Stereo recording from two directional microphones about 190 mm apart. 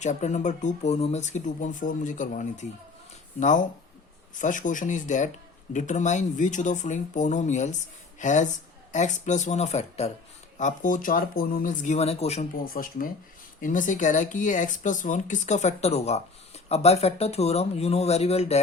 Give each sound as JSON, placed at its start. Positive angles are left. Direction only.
{"t": 0.0, "sound": "speech", "side_deg": 40}
{"t": 4.4, "sound": "speech", "side_deg": 40}
{"t": 12.7, "sound": "speech", "side_deg": 50}